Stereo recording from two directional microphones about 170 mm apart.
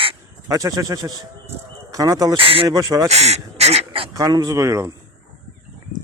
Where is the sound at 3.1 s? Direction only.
40° right (ahead or behind).